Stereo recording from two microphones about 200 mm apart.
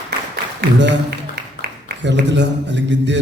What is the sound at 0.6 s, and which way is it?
A man's voice, 60° right (ahead or behind).